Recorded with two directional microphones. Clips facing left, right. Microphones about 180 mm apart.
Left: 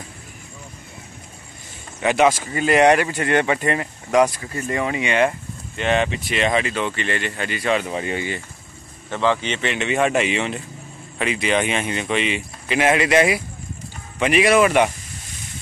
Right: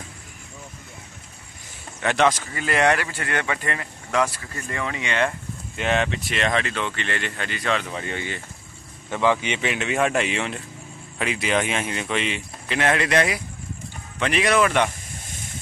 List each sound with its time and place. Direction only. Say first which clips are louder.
2.0 s speech: left 4 dB; 10° left (ahead or behind)
2.5 s speech: left 6 dB; 20° left (ahead or behind)
5.8 s speech: left 3 dB; centre (ahead or behind)
7.8 s speech: left 5 dB; 15° left (ahead or behind)
9.1 s speech: left 1 dB; 10° right (ahead or behind); by 14.9 s 10° left (ahead or behind)